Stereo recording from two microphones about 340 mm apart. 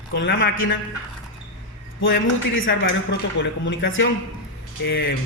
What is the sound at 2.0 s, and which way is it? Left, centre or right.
Speech, left.